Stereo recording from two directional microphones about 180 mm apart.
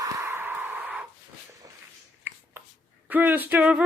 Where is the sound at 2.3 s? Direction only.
10° right (ahead or behind).